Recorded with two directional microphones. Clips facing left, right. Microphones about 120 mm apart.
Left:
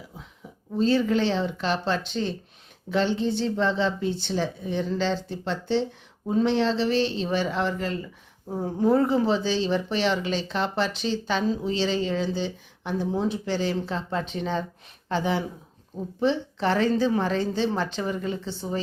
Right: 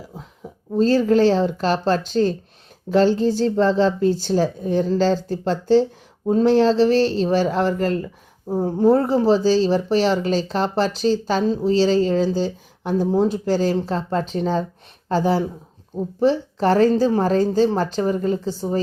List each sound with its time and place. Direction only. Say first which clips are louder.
0.4 s a sound: right 9 dB; 40° right (ahead or behind)
0.8 s speech: right 6 dB; 40° right (ahead or behind)
8.4 s speech: right 6 dB; 30° right (ahead or behind)